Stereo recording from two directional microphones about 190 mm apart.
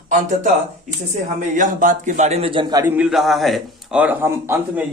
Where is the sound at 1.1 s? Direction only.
40° right (ahead or behind); by 2.8 s 25° right (ahead or behind).